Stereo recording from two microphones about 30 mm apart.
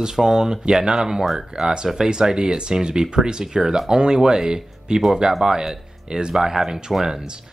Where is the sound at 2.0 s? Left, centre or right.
Right.